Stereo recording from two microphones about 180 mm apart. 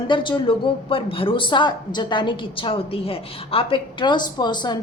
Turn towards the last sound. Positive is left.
turn(degrees=25)  # may be behind; listen again after turning